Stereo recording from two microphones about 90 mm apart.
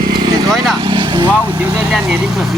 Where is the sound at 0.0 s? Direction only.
50° right (ahead or behind).